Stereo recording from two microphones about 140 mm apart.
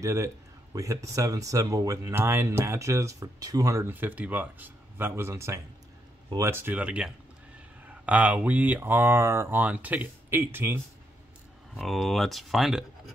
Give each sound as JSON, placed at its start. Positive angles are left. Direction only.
{"t": 0.0, "sound": "speech", "side_deg": -20}
{"t": 11.7, "sound": "speech", "side_deg": 0}